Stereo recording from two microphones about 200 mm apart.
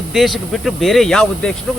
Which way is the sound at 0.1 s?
Centre (ahead or behind).